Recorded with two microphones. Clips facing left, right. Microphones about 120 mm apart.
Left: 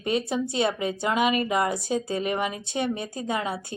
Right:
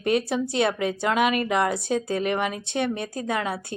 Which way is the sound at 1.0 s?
60° right (ahead or behind).